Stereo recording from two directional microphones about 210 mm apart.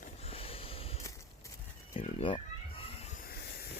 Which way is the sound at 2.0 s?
25° left (ahead or behind).